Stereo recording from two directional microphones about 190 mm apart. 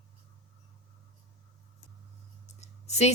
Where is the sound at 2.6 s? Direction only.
35° left (ahead or behind).